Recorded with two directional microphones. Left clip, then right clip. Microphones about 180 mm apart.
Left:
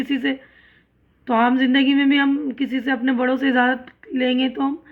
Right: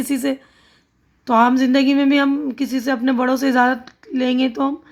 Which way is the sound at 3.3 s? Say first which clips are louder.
Right 3 dB; 40° right (ahead or behind).